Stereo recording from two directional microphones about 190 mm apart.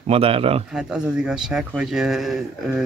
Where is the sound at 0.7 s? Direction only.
5° right (ahead or behind).